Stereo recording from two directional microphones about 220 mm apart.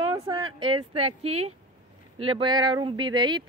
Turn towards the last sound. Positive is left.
turn(degrees=-20)  # may be behind; listen again after turning